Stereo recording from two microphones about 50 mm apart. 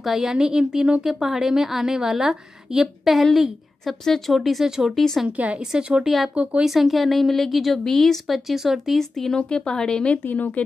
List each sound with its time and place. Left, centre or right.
0.0 s a woman's voice: centre
3.8 s a woman's voice: centre
4.6 s a woman's voice: centre
4.9 s a woman's voice: centre
5.6 s a woman's voice: centre
6.0 s a woman's voice: centre
6.3 s a woman's voice: right
6.6 s a woman's voice: centre
9.4 s speech: centre
10.2 s speech: left